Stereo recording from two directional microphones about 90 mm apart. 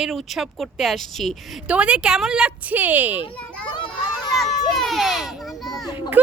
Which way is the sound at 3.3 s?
15° left (ahead or behind).